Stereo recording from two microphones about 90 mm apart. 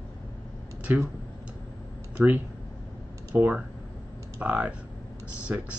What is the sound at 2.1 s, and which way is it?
Speech, 20° right (ahead or behind).